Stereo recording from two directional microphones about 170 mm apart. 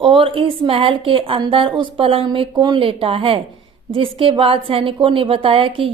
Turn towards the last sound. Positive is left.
turn(degrees=-30)  # may be behind; listen again after turning